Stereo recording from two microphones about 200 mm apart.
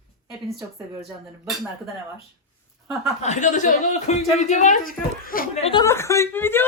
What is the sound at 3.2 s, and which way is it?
Speech, 35° left (ahead or behind).